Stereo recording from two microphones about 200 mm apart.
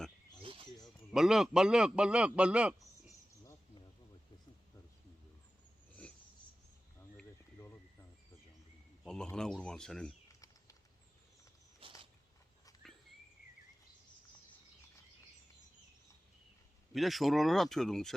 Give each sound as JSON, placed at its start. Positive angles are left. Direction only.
{"t": 0.4, "sound": "a sound", "side_deg": -25}
{"t": 0.9, "sound": "a man's voice", "side_deg": 0}
{"t": 7.3, "sound": "insect", "side_deg": 15}
{"t": 9.0, "sound": "speech", "side_deg": 5}
{"t": 11.8, "sound": "a sound", "side_deg": -25}
{"t": 16.9, "sound": "speech", "side_deg": 0}